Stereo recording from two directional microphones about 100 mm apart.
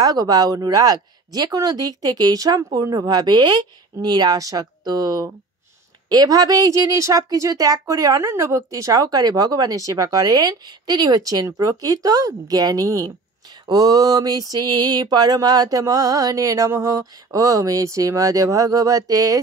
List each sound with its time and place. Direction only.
0.0 s speech: 40° right (ahead or behind)